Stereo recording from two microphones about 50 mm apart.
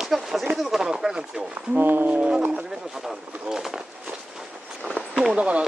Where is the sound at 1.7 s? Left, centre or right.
Right.